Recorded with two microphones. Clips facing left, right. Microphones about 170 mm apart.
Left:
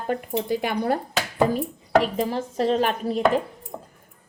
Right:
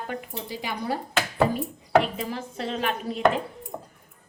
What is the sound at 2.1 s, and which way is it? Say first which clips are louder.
A woman's voice: left 7 dB; 40° left (ahead or behind).